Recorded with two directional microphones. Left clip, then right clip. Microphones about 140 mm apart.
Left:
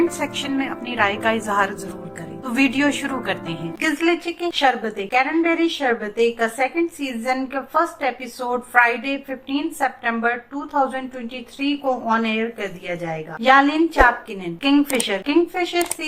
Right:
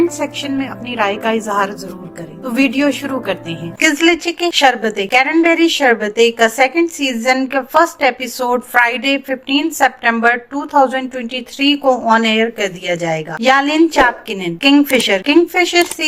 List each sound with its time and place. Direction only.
0.2 s a woman's voice: 20° right (ahead or behind)
3.8 s a woman's voice: 35° right (ahead or behind)